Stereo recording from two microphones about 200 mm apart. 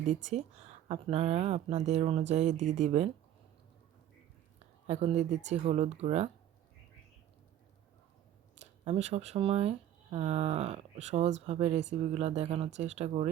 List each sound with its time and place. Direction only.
0.1 s speech: 35° right (ahead or behind)
4.9 s speech: 30° right (ahead or behind)
8.5 s speech: 30° right (ahead or behind)